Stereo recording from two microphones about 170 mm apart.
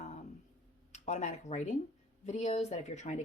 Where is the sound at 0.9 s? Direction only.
45° left (ahead or behind).